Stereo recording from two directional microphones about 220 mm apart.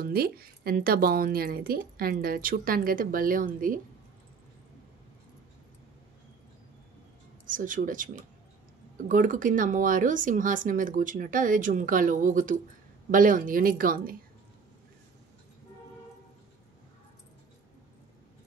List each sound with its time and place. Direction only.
0.0 s speech: 45° right (ahead or behind)
7.4 s speech: 35° right (ahead or behind)